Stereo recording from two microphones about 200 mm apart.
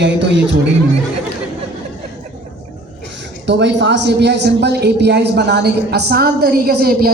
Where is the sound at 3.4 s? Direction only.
60° right (ahead or behind).